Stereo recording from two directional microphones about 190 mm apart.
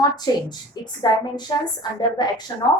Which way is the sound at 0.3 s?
20° left (ahead or behind).